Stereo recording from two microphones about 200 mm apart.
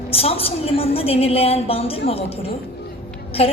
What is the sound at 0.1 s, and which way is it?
A woman's voice, 30° left (ahead or behind).